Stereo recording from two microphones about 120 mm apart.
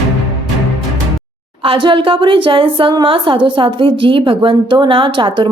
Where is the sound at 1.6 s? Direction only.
45° right (ahead or behind).